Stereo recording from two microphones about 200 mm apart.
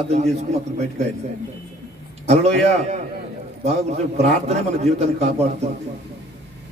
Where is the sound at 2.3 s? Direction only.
30° right (ahead or behind).